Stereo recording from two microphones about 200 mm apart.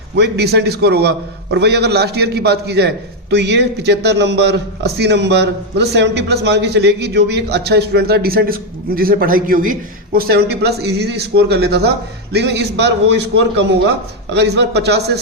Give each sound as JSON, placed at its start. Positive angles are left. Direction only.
{"t": 0.2, "sound": "a man's voice", "side_deg": -55}